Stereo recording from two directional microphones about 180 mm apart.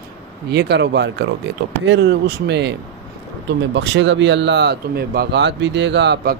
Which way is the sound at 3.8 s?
90° right.